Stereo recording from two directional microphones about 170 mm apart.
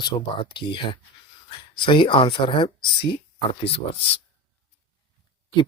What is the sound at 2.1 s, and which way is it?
Speech, 30° left (ahead or behind).